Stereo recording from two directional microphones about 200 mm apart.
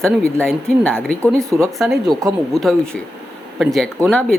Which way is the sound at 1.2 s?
15° right (ahead or behind).